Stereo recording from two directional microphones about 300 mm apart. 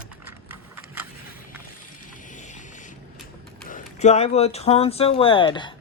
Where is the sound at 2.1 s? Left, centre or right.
Left.